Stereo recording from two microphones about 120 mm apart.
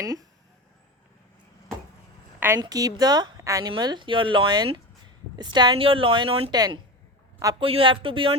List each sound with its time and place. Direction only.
0.0 s speech: 30° right (ahead or behind)
2.6 s a woman's voice: 30° right (ahead or behind); by 6.5 s 50° right (ahead or behind)
6.5 s a woman's voice: 35° right (ahead or behind)
7.6 s a woman's voice: 50° right (ahead or behind)